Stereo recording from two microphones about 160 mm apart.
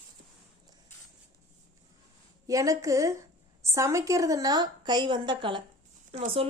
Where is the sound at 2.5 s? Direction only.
20° right (ahead or behind).